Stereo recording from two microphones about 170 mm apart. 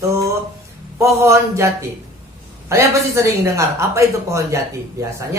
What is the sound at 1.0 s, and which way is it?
Speech, 15° right (ahead or behind).